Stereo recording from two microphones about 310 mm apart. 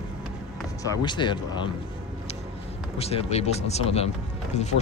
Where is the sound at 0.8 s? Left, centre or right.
Centre.